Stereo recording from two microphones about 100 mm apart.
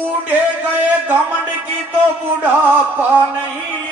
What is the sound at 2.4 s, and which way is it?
Music, 20° right (ahead or behind).